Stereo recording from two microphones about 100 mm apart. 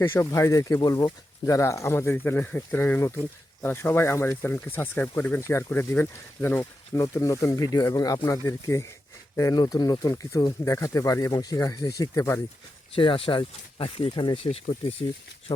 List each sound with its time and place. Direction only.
0.0 s speech: 25° left (ahead or behind)
7.0 s speech: 35° left (ahead or behind)
12.9 s speech: 60° left (ahead or behind)
14.3 s speech: 70° left (ahead or behind)
15.5 s speech: 45° left (ahead or behind)